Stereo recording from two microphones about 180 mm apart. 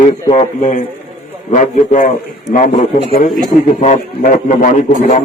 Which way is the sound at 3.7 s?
45° left (ahead or behind).